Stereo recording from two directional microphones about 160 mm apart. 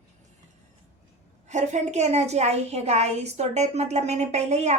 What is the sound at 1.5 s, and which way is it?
A woman's voice, 45° right (ahead or behind).